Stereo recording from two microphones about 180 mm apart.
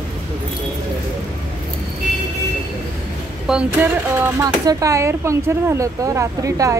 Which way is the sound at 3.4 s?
5° right (ahead or behind).